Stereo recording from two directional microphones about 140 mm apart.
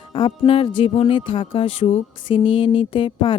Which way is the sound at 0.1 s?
40° left (ahead or behind).